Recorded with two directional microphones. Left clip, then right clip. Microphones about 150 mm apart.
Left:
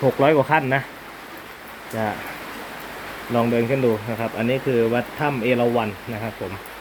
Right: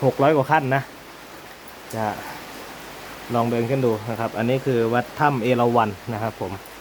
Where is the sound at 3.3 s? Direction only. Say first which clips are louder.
Left 2 dB; 20° right (ahead or behind); by 5.9 s 35° right (ahead or behind).